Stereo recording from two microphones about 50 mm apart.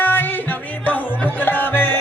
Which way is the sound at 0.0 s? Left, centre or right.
Left.